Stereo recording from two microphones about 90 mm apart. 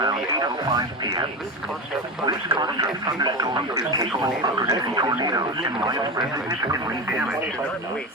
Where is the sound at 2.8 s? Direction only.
45° right (ahead or behind).